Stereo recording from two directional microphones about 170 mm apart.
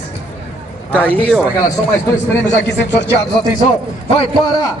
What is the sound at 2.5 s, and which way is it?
Speech, 90° left.